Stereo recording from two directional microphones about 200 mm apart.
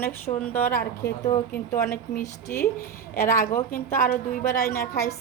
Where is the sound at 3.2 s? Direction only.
15° left (ahead or behind).